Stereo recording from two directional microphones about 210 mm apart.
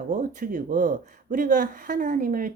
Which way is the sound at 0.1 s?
35° right (ahead or behind).